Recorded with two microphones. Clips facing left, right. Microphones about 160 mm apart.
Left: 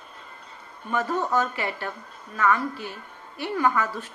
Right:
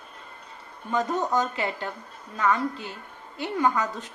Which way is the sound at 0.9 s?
20° right (ahead or behind).